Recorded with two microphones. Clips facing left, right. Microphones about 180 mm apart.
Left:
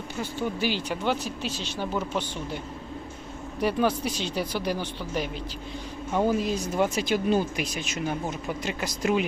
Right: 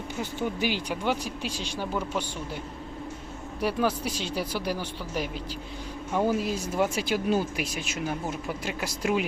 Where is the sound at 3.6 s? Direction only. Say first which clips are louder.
Left 2 dB; 5° right (ahead or behind).